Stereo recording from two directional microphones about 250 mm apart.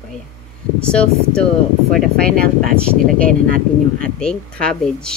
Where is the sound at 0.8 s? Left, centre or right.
Centre.